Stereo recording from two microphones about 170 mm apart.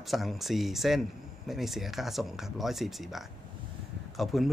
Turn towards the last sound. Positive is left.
turn(degrees=0)  # may be behind; listen again after turning